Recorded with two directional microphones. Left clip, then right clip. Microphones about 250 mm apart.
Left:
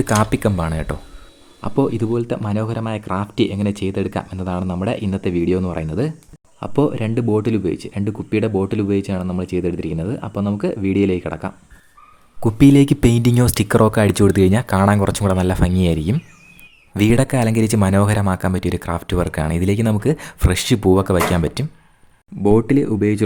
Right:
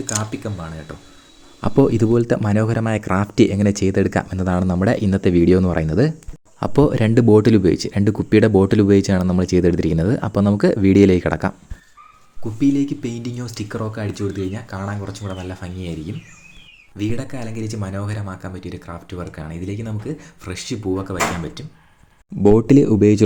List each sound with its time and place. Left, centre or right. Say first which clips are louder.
0.1 s speech: left 8 dB; left
1.6 s speech: right 3 dB; centre
12.4 s speech: left 6 dB; left
22.4 s speech: right 2 dB; centre